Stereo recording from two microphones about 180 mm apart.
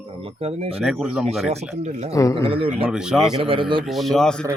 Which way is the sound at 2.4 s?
30° right (ahead or behind).